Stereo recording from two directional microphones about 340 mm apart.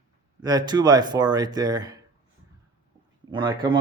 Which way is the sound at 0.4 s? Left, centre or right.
Centre.